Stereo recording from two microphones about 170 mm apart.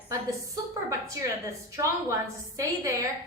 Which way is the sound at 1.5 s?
20° right (ahead or behind).